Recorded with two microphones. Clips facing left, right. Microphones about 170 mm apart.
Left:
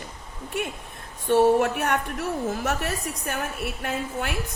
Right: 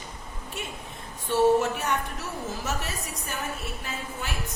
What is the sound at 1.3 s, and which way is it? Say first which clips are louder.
A woman's voice: left 3 dB; 60° left (ahead or behind).